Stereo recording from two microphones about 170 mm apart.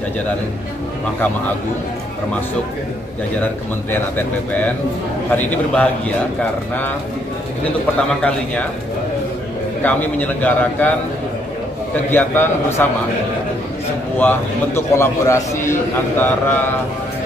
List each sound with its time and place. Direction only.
5.3 s a man's voice: 10° left (ahead or behind)
9.8 s a man's voice: 10° left (ahead or behind)
11.9 s a man's voice: 10° left (ahead or behind)
14.1 s a man's voice: 15° left (ahead or behind)